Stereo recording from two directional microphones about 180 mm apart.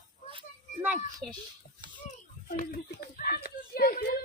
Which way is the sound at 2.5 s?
50° left (ahead or behind).